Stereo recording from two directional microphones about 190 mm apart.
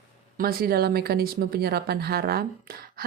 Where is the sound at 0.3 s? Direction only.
50° right (ahead or behind).